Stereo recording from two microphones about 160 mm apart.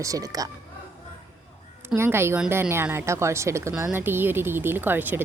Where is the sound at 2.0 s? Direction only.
15° right (ahead or behind).